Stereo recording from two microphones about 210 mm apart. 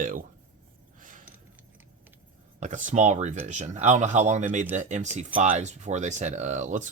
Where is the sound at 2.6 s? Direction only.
35° right (ahead or behind).